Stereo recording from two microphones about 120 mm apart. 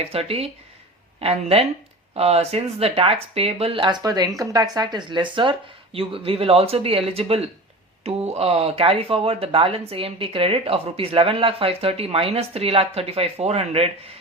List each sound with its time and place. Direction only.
0.0 s speech: 55° right (ahead or behind)
3.8 s speech: 35° right (ahead or behind); by 13.9 s 55° right (ahead or behind)